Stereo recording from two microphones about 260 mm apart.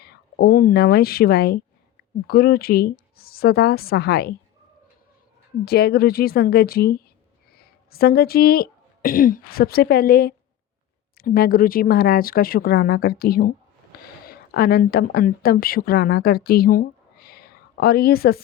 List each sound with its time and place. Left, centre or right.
0.0 s speech: left
5.6 s speech: left